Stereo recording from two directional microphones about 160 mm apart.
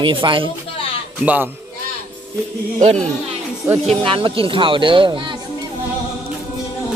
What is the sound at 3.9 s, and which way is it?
Speech, 35° right (ahead or behind).